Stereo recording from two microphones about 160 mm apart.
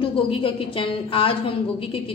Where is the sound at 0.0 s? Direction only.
35° left (ahead or behind).